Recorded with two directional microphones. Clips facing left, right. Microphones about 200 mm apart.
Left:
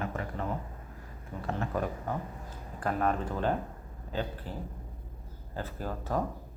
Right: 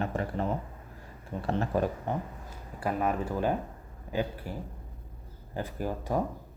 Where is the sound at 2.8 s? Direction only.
10° right (ahead or behind).